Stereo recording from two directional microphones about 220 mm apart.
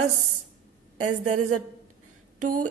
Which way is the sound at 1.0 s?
35° right (ahead or behind).